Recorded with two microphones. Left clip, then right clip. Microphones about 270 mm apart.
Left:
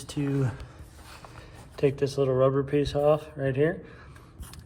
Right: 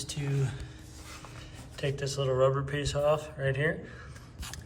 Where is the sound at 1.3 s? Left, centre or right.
Centre.